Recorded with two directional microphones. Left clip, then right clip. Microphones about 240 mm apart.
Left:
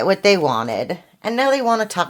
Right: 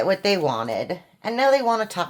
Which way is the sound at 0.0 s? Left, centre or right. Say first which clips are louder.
Left 5 dB; left.